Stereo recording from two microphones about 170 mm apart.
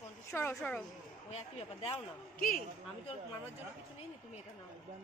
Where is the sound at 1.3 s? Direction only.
35° left (ahead or behind).